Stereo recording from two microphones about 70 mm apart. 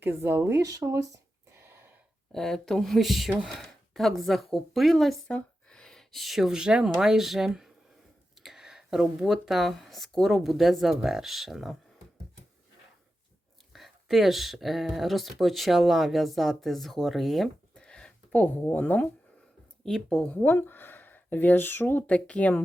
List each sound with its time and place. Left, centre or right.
0.0 s speech: right
0.6 s speech: right
1.6 s a sound: right
2.3 s speech: centre
5.3 s speech: centre
13.7 s speech: centre
17.7 s a sound: centre
19.8 s speech: centre
20.3 s speech: left
22.1 s speech: centre